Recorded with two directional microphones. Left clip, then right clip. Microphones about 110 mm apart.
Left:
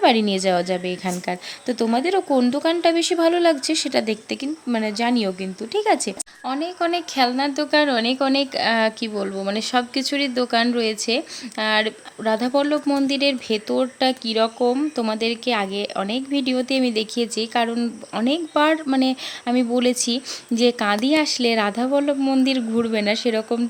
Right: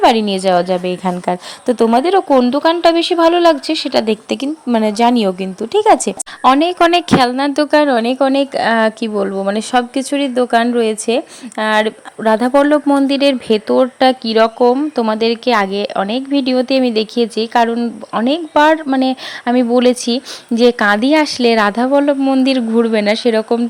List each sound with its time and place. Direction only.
0.0 s speech: 15° right (ahead or behind)
4.3 s a woman's voice: 45° right (ahead or behind)
7.3 s speech: 90° right
7.8 s speech: 40° right (ahead or behind); by 17.7 s 25° right (ahead or behind)
17.7 s speech: 10° right (ahead or behind)
18.3 s speech: 25° right (ahead or behind)
22.2 s speech: 10° right (ahead or behind)
22.4 s speech: 25° right (ahead or behind)